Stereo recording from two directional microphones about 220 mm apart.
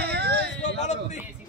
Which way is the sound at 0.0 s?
45° right (ahead or behind).